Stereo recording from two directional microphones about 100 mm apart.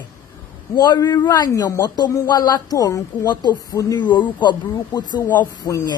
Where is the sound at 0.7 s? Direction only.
40° left (ahead or behind).